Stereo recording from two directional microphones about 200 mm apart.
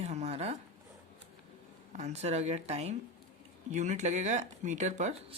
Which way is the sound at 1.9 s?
35° right (ahead or behind).